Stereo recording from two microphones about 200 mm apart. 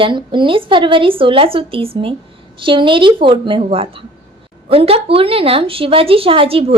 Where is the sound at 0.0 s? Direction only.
25° right (ahead or behind).